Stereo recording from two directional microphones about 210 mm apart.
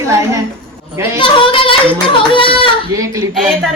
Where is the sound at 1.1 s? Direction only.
25° left (ahead or behind).